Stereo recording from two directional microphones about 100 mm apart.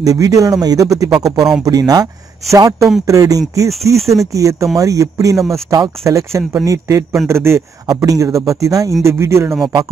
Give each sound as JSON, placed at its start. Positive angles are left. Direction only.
{"t": 0.0, "sound": "speech", "side_deg": -35}
{"t": 1.1, "sound": "speech", "side_deg": -5}
{"t": 1.6, "sound": "speech", "side_deg": -40}
{"t": 7.8, "sound": "speech", "side_deg": -35}